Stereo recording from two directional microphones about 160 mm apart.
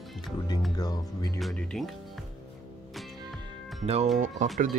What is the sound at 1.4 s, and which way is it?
Speech, centre (ahead or behind).